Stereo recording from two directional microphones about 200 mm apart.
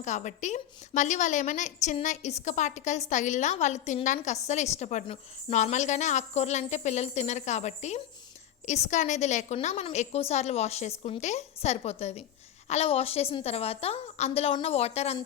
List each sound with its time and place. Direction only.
0.0 s a woman's voice: 35° left (ahead or behind)